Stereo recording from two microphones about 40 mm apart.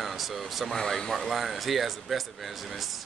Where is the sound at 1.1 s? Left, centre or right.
Centre.